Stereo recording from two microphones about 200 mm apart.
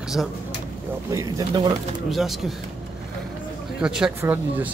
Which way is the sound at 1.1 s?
20° right (ahead or behind).